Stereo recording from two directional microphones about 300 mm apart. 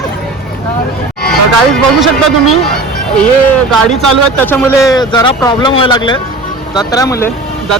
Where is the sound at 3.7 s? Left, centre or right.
Right.